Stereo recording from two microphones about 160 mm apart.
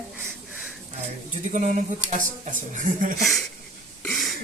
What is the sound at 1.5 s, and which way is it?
Speech, 50° right (ahead or behind).